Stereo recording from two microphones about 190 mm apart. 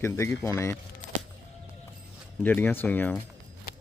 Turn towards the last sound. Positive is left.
turn(degrees=10)  # may be behind; listen again after turning